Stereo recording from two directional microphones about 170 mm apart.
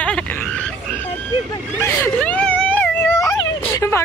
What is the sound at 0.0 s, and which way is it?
Frog, 5° left (ahead or behind).